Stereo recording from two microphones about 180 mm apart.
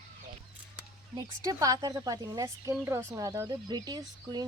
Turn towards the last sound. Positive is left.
turn(degrees=-25)  # may be behind; listen again after turning